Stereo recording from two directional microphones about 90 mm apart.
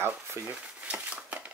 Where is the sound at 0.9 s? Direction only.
15° right (ahead or behind).